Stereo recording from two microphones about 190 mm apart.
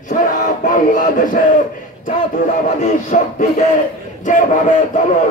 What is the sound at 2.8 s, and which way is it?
Music, 35° left (ahead or behind).